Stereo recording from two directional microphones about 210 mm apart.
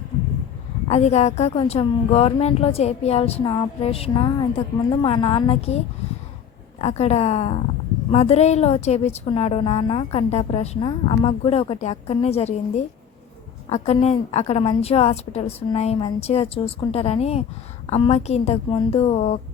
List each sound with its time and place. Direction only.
0.9 s a woman's voice: 30° left (ahead or behind)
6.8 s a woman's voice: 30° left (ahead or behind)